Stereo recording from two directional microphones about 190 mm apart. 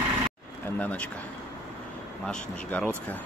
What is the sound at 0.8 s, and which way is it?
Speech, 5° left (ahead or behind).